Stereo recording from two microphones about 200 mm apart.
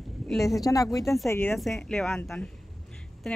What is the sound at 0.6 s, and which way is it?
Speech, 15° left (ahead or behind).